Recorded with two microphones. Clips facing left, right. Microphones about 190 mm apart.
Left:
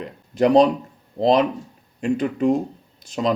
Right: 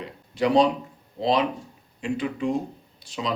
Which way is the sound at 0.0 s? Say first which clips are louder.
Left 6 dB; 45° left (ahead or behind).